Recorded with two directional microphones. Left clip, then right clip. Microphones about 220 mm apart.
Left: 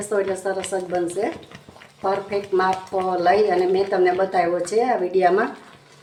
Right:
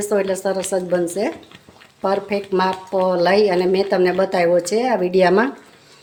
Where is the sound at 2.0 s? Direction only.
50° right (ahead or behind).